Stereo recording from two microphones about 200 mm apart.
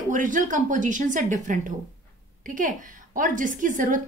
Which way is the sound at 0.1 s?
40° right (ahead or behind).